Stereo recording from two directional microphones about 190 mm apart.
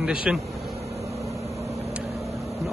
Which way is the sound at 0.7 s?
35° right (ahead or behind).